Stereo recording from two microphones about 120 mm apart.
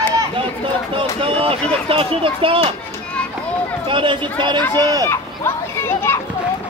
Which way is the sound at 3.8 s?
45° right (ahead or behind).